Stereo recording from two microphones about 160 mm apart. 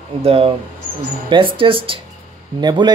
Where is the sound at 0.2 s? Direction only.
40° right (ahead or behind).